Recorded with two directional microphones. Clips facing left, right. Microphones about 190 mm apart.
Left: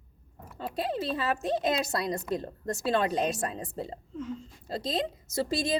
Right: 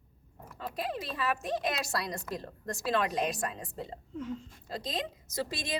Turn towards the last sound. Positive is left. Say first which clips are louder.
# left 7 dB
turn(degrees=25)  # may be behind; listen again after turning